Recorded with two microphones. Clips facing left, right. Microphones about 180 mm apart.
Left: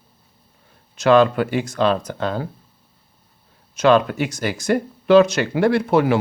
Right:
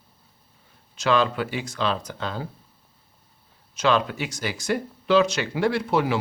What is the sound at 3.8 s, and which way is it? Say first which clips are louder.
Speech: left 7 dB; 50° left (ahead or behind).